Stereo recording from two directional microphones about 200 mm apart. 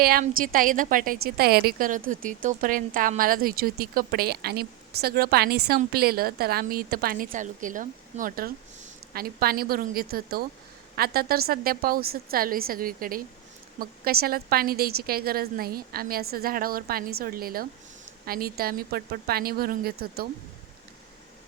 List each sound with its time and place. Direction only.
0.0 s a woman's voice: 45° right (ahead or behind)